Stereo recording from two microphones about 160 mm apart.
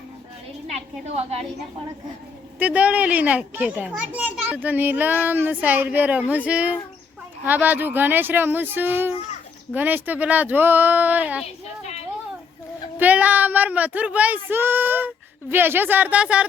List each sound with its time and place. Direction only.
0.7 s a woman's voice: 40° right (ahead or behind)
2.6 s a child's voice: 10° right (ahead or behind)
13.0 s a child's voice: 10° right (ahead or behind)